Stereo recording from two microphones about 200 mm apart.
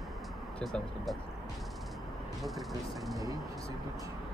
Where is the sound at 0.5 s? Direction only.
5° left (ahead or behind).